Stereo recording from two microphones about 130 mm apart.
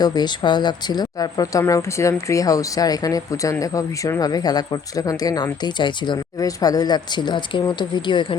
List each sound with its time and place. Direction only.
0.0 s speech: 30° left (ahead or behind)